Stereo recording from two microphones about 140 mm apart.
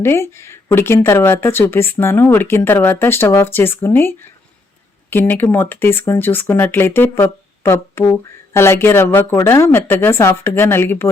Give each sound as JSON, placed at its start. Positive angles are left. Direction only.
{"t": 0.0, "sound": "speech", "side_deg": 20}
{"t": 5.1, "sound": "speech", "side_deg": 15}